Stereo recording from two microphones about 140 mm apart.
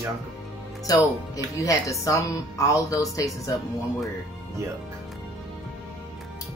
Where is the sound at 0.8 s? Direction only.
25° left (ahead or behind).